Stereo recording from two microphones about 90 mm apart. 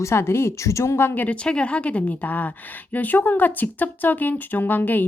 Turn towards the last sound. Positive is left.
turn(degrees=20)  # may be behind; listen again after turning